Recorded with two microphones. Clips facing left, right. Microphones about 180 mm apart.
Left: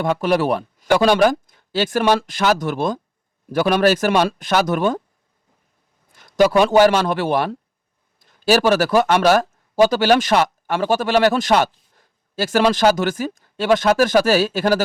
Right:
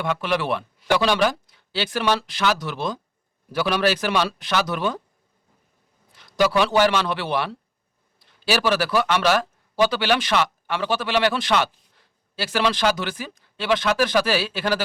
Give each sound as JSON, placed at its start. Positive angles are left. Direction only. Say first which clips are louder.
{"t": 0.0, "sound": "speech", "louder": "left 6 dB", "side_deg": 40}
{"t": 6.1, "sound": "a man's voice", "louder": "left 5 dB", "side_deg": 50}